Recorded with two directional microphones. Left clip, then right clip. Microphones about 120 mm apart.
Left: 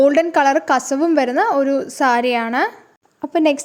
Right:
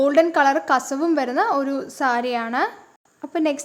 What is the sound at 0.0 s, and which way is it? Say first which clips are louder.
A woman's voice: left 3 dB; 30° left (ahead or behind).